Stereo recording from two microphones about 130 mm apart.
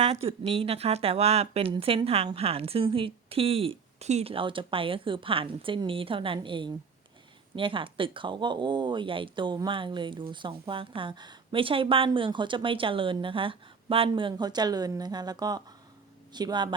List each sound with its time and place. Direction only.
0.0 s a woman's voice: 55° right (ahead or behind); by 16.7 s 35° right (ahead or behind)